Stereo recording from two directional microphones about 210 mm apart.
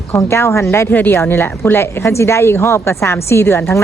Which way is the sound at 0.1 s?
10° left (ahead or behind).